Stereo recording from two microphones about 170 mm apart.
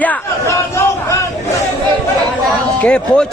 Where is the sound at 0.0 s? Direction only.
10° left (ahead or behind).